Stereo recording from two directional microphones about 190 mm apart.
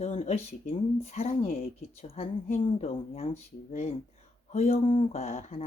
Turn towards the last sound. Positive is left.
turn(degrees=35)  # may be behind; listen again after turning